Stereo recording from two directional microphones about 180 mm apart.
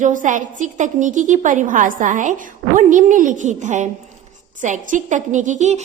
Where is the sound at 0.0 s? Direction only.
45° right (ahead or behind).